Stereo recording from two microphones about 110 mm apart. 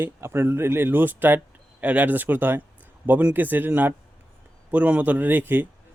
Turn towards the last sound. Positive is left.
turn(degrees=-15)  # may be behind; listen again after turning